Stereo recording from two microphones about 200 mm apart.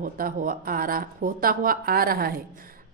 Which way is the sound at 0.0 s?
45° right (ahead or behind).